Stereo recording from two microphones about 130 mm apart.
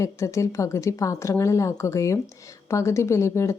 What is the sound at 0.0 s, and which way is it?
A woman's voice, 25° left (ahead or behind).